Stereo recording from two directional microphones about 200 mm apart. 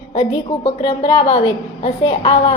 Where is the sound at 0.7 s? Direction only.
30° left (ahead or behind).